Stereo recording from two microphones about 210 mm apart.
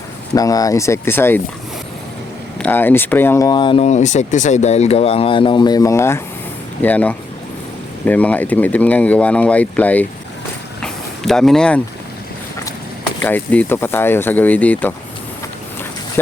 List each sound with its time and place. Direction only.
0.3 s speech: 15° left (ahead or behind)
2.6 s speech: 10° left (ahead or behind)
10.8 s a sound: 5° left (ahead or behind)
13.2 s speech: 10° left (ahead or behind)
16.2 s speech: 10° left (ahead or behind)